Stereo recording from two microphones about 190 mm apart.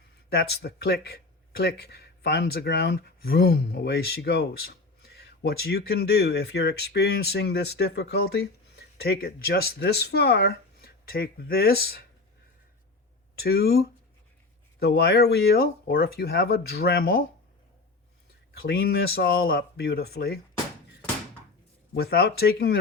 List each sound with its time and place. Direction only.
0.3 s speech: 55° left (ahead or behind)
13.4 s speech: 55° left (ahead or behind)
18.6 s speech: 55° left (ahead or behind)
21.9 s speech: 55° left (ahead or behind)